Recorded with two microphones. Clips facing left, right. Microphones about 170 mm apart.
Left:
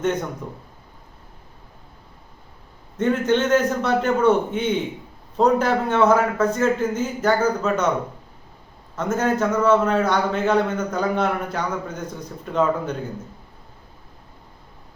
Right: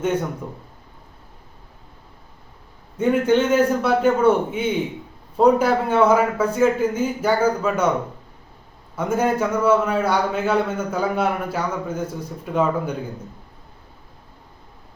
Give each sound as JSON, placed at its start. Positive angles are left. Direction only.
{"t": 0.0, "sound": "a man's voice", "side_deg": -10}
{"t": 3.0, "sound": "a man's voice", "side_deg": -10}
{"t": 9.0, "sound": "a man's voice", "side_deg": -10}